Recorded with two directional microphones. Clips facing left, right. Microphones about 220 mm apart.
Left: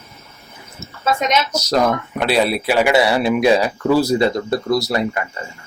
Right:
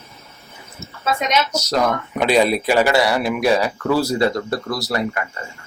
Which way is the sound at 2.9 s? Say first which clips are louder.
Left 3 dB; 25° left (ahead or behind).